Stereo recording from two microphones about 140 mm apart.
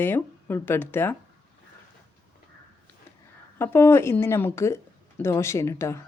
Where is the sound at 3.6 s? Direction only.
15° left (ahead or behind).